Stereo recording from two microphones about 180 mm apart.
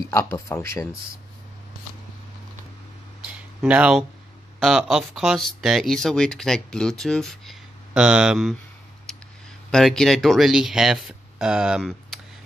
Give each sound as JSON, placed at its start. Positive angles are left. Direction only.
{"t": 0.0, "sound": "speech", "side_deg": 15}
{"t": 3.3, "sound": "a sound", "side_deg": -5}
{"t": 4.6, "sound": "speech", "side_deg": 0}
{"t": 9.7, "sound": "speech", "side_deg": 0}